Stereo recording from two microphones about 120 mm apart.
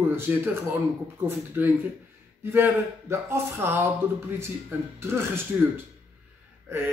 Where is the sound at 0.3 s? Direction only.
15° right (ahead or behind).